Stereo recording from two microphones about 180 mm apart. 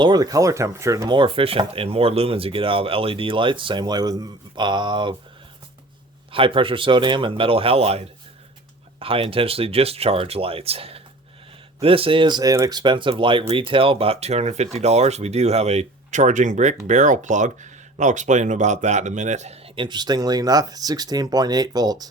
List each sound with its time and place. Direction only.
0.0 s speech: 20° right (ahead or behind)
6.3 s speech: 30° right (ahead or behind)